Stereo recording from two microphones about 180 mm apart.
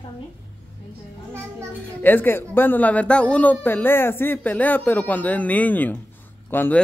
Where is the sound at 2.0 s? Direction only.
10° left (ahead or behind).